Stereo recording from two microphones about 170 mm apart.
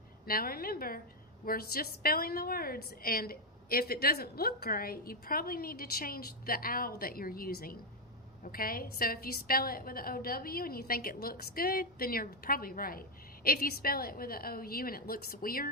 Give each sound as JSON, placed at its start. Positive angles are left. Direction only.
{"t": 0.3, "sound": "a woman's voice", "side_deg": 60}